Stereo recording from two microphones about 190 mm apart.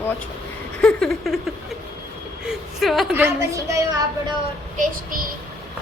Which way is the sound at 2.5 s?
Centre (ahead or behind).